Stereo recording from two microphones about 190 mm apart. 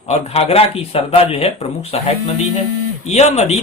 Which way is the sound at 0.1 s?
30° left (ahead or behind).